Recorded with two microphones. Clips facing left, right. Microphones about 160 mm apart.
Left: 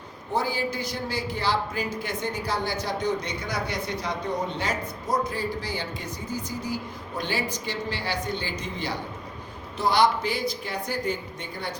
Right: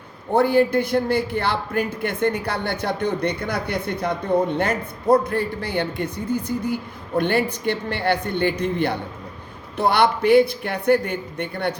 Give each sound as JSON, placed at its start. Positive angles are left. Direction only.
{"t": 0.3, "sound": "a man's voice", "side_deg": -60}